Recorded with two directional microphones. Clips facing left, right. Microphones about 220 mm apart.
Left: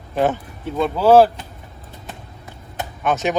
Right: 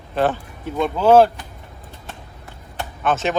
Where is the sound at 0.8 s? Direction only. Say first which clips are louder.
Left 1 dB; 5° left (ahead or behind).